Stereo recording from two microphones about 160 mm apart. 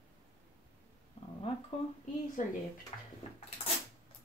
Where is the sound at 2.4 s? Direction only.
55° left (ahead or behind).